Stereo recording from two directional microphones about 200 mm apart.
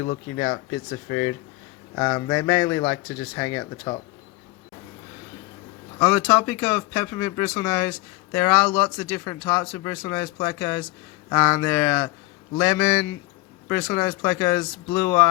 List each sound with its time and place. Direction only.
0.3 s speech: 20° left (ahead or behind)
6.0 s speech: 10° left (ahead or behind)
8.6 s speech: 25° left (ahead or behind)
9.1 s speech: 15° left (ahead or behind)
11.5 s speech: 10° left (ahead or behind)
13.8 s speech: 15° left (ahead or behind)